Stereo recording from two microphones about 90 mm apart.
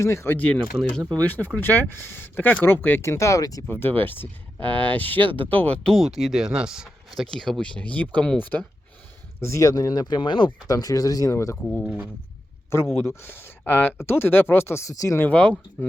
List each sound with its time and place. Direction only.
0.0 s speech: 30° left (ahead or behind)
0.3 s speech: 15° left (ahead or behind)
3.0 s speech: 30° left (ahead or behind)
3.7 s speech: 25° left (ahead or behind)
5.3 s speech: 70° right (ahead or behind)
5.5 s speech: 15° left (ahead or behind)
5.9 s speech: centre (ahead or behind); by 8.6 s 20° left (ahead or behind)
9.4 s speech: 35° left (ahead or behind); by 10.5 s 60° left (ahead or behind)
10.7 s speech: 45° left (ahead or behind)
12.7 s speech: 30° left (ahead or behind)
15.2 s speech: 15° left (ahead or behind)